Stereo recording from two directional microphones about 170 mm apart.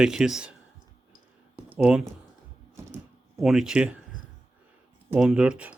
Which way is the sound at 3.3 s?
5° right (ahead or behind).